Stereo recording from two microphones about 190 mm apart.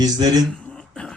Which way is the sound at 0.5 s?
5° left (ahead or behind).